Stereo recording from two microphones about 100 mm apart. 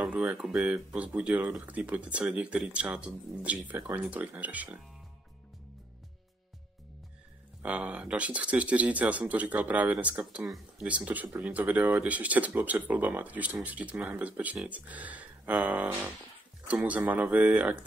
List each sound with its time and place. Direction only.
0.0 s speech: 10° right (ahead or behind)
7.6 s speech: 10° right (ahead or behind)
10.4 s speech: 5° right (ahead or behind)
10.9 s speech: 15° right (ahead or behind)